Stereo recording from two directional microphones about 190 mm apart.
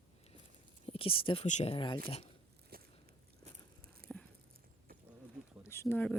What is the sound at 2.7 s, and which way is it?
Biting, 50° right (ahead or behind).